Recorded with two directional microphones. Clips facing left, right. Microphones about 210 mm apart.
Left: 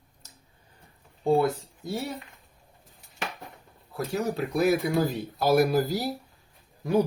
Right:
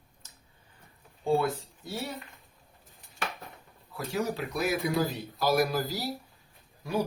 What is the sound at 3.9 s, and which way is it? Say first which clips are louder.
Speech: left 3 dB; 40° left (ahead or behind).